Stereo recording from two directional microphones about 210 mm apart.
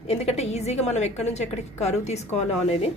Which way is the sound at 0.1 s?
30° left (ahead or behind).